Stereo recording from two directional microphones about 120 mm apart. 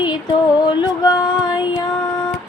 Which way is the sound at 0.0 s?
40° left (ahead or behind).